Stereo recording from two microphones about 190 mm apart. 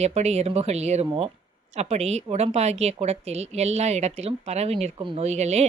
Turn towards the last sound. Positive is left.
turn(degrees=-35)  # may be behind; listen again after turning